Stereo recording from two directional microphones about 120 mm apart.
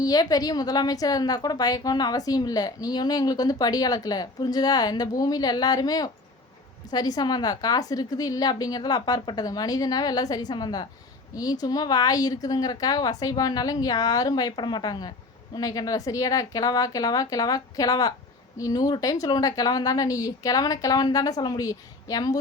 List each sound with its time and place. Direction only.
0.0 s a woman's voice: 30° left (ahead or behind)